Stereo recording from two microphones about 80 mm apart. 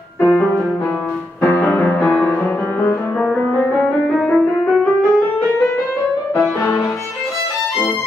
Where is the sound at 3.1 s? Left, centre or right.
Centre.